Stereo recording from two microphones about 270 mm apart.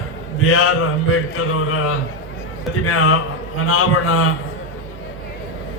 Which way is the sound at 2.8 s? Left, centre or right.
Left.